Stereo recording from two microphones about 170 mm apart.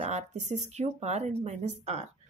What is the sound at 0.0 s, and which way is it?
A woman's voice, 40° right (ahead or behind).